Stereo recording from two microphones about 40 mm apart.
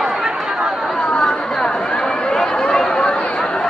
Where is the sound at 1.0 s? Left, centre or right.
Left.